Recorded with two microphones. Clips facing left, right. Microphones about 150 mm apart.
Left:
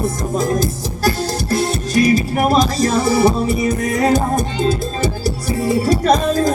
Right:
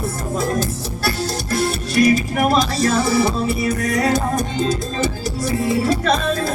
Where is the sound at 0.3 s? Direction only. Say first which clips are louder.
Left 2 dB; 40° left (ahead or behind).